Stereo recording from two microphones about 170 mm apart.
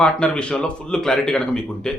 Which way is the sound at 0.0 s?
5° left (ahead or behind).